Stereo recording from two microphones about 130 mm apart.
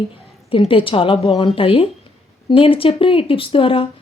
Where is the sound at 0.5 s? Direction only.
45° left (ahead or behind).